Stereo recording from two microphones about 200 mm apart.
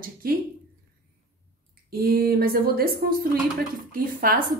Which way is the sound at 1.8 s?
50° right (ahead or behind).